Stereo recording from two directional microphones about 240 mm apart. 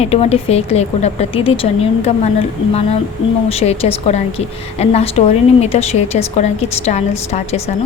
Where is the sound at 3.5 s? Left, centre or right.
Left.